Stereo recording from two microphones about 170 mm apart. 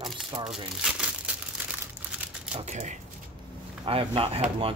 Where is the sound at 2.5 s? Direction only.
40° right (ahead or behind).